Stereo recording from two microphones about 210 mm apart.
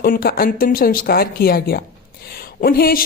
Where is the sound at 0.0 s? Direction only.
45° left (ahead or behind).